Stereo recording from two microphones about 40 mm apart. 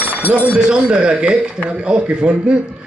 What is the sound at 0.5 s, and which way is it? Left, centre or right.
A man's voice, right.